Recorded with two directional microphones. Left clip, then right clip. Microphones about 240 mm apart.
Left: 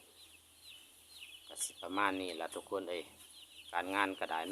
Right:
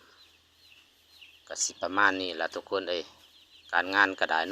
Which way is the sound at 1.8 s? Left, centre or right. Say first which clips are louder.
Right 10 dB; centre.